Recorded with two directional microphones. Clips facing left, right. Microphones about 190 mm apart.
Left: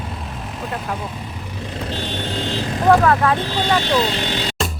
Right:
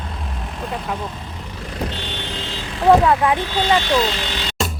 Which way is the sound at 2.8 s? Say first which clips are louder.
Right 1 dB; 20° right (ahead or behind).